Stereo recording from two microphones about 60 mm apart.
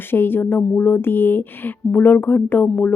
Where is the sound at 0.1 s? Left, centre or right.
Left.